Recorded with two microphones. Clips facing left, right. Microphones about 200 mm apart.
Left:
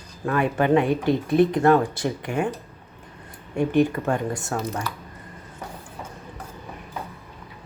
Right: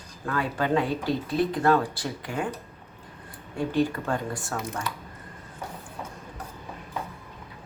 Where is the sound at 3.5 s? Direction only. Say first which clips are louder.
Left 5 dB; 20° left (ahead or behind).